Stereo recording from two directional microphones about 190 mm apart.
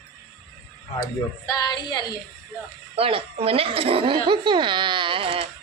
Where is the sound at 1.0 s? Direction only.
20° left (ahead or behind).